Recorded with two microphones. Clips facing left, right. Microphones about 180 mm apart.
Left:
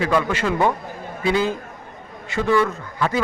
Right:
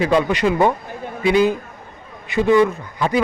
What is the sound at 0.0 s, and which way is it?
A man's voice, 20° right (ahead or behind).